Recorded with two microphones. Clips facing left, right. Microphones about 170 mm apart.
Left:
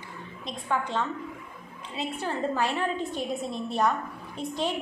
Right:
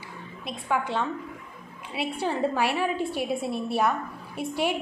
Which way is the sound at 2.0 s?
10° right (ahead or behind).